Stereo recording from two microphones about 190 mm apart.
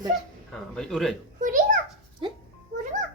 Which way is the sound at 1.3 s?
45° right (ahead or behind).